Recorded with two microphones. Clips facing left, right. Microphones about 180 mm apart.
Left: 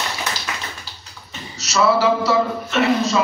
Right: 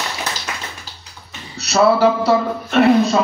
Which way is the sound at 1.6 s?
55° right (ahead or behind).